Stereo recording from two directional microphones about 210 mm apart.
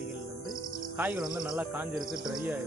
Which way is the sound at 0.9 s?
10° right (ahead or behind).